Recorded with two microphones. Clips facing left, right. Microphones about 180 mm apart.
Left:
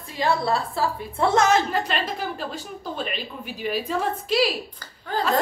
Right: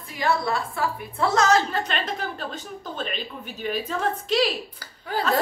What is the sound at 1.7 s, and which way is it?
Speech, 10° left (ahead or behind).